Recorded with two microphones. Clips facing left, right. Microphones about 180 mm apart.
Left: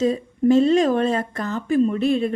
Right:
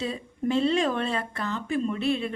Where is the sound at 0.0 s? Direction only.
40° left (ahead or behind).